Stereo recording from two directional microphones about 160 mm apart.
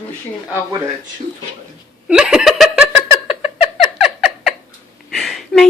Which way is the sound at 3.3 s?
40° left (ahead or behind).